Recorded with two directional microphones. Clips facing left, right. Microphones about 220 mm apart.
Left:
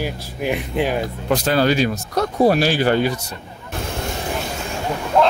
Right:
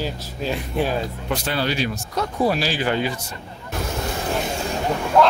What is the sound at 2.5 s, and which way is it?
Speech, 55° left (ahead or behind).